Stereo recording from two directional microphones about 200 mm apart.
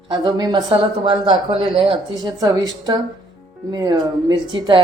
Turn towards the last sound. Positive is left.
turn(degrees=-20)  # may be behind; listen again after turning